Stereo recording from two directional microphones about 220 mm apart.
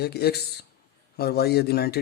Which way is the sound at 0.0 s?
45° left (ahead or behind).